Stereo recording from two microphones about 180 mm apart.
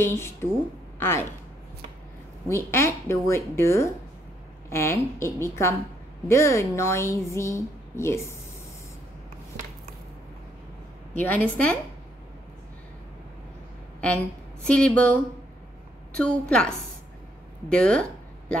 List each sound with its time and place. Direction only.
0.0 s a woman's voice: 15° left (ahead or behind)
2.5 s a woman's voice: 15° left (ahead or behind)
11.1 s a woman's voice: 10° left (ahead or behind)
14.7 s a woman's voice: 5° left (ahead or behind)